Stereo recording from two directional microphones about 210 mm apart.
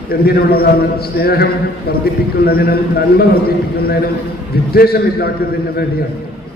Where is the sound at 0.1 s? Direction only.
45° left (ahead or behind).